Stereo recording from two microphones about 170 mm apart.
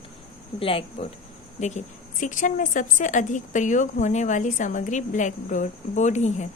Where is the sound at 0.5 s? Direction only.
30° left (ahead or behind).